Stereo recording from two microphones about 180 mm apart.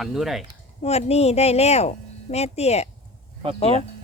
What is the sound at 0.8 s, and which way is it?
Speech, 35° left (ahead or behind).